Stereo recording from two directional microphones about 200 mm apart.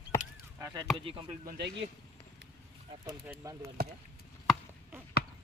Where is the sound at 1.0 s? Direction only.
25° right (ahead or behind).